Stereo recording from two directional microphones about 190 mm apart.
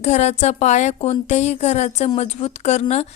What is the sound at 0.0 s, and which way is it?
A woman's voice, 35° left (ahead or behind).